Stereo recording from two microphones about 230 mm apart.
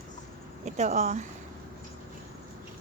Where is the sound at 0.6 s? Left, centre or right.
Right.